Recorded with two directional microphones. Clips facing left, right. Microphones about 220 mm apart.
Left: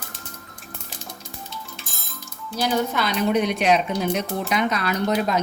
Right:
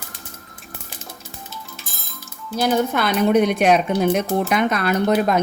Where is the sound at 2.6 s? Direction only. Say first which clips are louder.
Right 4 dB; 50° right (ahead or behind).